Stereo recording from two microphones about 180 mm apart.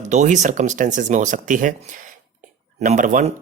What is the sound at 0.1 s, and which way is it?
Speech, 40° right (ahead or behind).